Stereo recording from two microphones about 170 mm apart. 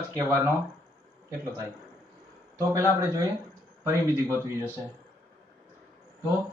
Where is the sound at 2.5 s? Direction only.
15° right (ahead or behind).